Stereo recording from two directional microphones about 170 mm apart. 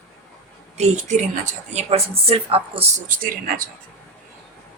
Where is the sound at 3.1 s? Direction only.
55° right (ahead or behind).